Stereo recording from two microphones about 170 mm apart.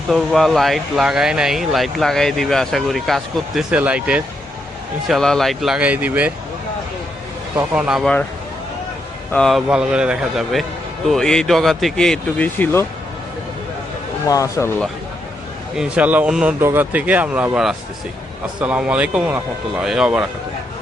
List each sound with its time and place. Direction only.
0.1 s speech: centre (ahead or behind)
7.7 s speech: 5° right (ahead or behind)
9.3 s speech: 5° left (ahead or behind)
14.3 s speech: 20° left (ahead or behind)
15.7 s a man's voice: 5° right (ahead or behind)